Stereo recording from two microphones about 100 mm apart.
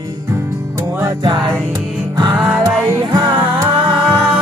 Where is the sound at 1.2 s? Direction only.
50° right (ahead or behind).